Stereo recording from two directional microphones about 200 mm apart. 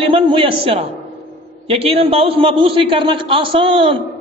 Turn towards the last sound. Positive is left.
turn(degrees=-25)  # may be behind; listen again after turning